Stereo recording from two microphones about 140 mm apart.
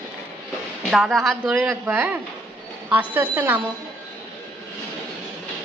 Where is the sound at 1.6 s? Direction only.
15° right (ahead or behind).